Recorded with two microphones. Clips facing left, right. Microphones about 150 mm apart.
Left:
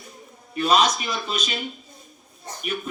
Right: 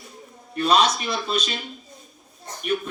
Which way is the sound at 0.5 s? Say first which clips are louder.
Even; 10° left (ahead or behind).